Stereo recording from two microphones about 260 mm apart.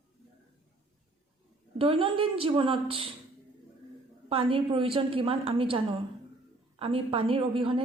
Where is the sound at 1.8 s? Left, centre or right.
Right.